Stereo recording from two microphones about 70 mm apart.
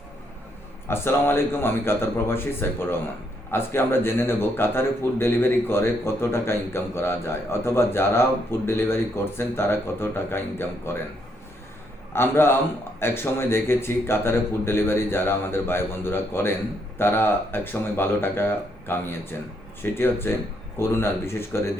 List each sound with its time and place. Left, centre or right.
0.9 s speech: left
12.1 s speech: left